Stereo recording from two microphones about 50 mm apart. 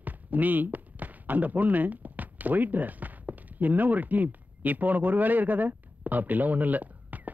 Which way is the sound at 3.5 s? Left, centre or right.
Right.